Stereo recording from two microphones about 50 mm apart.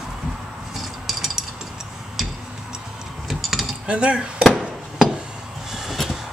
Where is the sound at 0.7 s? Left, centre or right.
Centre.